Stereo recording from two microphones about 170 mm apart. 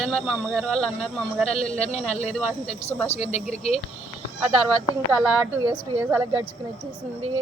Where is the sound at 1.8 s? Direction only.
40° left (ahead or behind).